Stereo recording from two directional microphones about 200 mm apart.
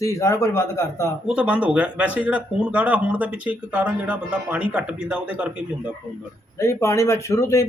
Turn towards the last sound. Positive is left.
turn(degrees=15)  # may be behind; listen again after turning